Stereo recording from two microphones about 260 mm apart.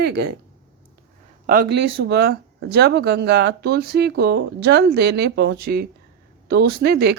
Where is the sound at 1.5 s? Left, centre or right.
Right.